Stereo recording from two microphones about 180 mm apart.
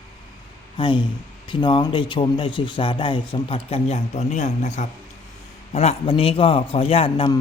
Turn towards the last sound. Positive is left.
turn(degrees=25)  # may be behind; listen again after turning